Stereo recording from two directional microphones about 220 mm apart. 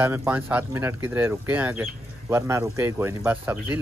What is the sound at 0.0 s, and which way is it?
Speech, 10° right (ahead or behind).